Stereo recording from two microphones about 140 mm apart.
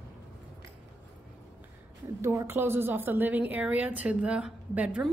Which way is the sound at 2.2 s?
20° right (ahead or behind).